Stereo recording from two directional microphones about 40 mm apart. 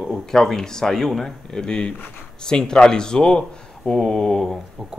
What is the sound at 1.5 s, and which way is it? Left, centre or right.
Speech, centre.